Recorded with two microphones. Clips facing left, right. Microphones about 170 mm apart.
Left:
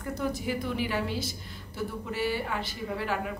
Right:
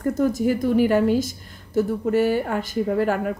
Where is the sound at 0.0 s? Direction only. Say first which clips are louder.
Right 11 dB; 45° right (ahead or behind).